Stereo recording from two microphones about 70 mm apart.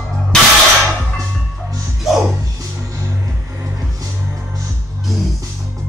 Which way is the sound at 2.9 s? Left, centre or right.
Right.